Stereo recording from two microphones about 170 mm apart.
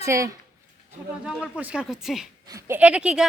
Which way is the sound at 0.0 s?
15° right (ahead or behind).